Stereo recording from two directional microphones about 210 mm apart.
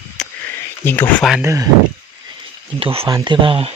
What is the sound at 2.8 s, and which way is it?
Speech, 25° right (ahead or behind).